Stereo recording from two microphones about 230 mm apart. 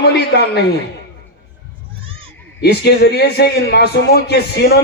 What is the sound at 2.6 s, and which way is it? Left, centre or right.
A man's voice, left.